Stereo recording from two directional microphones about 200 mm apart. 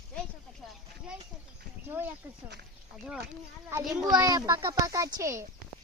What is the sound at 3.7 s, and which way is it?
Speech, 15° right (ahead or behind).